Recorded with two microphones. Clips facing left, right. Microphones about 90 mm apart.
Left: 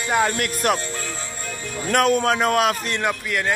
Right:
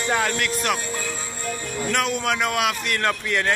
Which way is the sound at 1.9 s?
45° left (ahead or behind).